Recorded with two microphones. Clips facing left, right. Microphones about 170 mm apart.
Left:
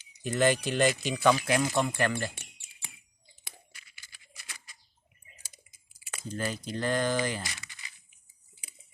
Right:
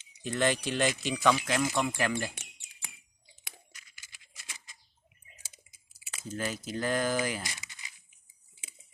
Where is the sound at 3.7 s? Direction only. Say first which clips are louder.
Left 1 dB; 45° right (ahead or behind).